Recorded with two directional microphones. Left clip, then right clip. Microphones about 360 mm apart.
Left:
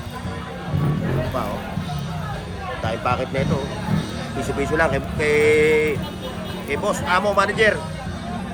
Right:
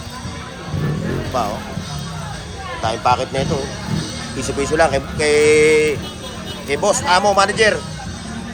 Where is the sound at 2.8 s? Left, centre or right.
Centre.